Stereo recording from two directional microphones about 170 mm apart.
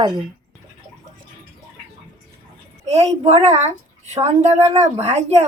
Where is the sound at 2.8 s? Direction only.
40° right (ahead or behind).